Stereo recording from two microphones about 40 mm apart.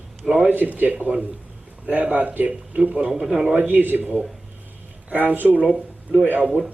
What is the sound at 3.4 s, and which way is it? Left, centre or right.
Speech, right.